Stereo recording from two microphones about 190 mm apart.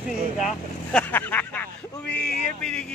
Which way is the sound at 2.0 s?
60° left (ahead or behind).